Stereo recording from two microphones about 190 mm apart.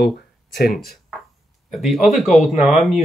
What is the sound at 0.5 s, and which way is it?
Speech, 50° left (ahead or behind).